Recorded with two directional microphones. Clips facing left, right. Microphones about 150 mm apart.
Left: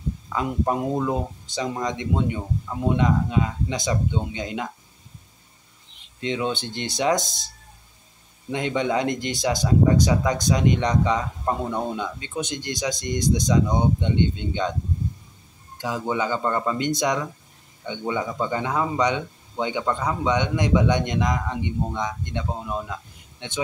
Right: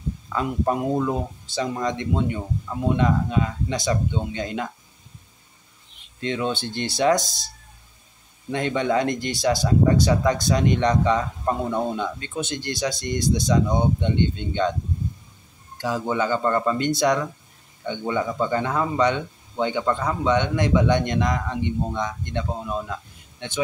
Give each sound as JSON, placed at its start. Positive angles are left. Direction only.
{"t": 0.3, "sound": "a man's voice", "side_deg": 15}
{"t": 6.2, "sound": "a man's voice", "side_deg": 20}
{"t": 15.8, "sound": "a man's voice", "side_deg": 15}